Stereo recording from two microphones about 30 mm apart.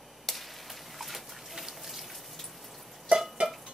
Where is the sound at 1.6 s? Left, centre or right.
Centre.